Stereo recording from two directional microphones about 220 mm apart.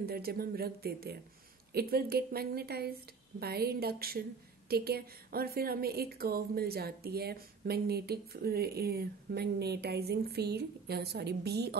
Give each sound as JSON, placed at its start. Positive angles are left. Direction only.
{"t": 0.0, "sound": "speech", "side_deg": -45}